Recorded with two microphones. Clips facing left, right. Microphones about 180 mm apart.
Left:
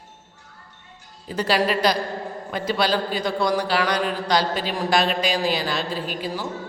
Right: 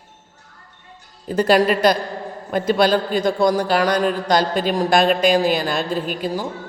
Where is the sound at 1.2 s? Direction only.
50° right (ahead or behind).